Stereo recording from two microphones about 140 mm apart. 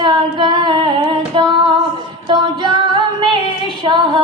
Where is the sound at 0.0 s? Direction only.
30° right (ahead or behind).